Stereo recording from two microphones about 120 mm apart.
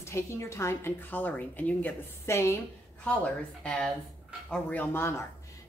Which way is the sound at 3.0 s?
10° left (ahead or behind).